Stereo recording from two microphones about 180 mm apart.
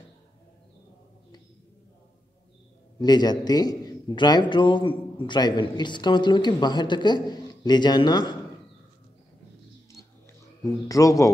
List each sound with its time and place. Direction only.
3.0 s a man's voice: 25° left (ahead or behind)
10.6 s speech: 20° left (ahead or behind)